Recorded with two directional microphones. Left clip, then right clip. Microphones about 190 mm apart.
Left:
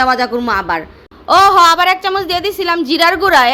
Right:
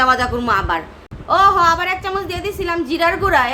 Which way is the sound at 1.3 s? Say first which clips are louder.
Left 5 dB; 55° left (ahead or behind).